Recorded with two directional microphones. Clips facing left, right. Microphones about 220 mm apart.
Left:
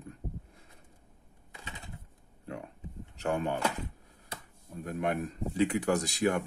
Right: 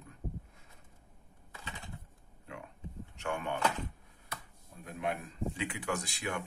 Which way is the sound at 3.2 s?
35° left (ahead or behind).